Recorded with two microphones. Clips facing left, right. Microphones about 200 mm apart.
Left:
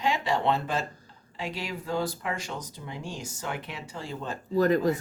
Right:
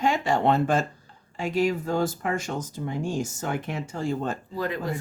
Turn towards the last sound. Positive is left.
turn(degrees=45)  # may be behind; listen again after turning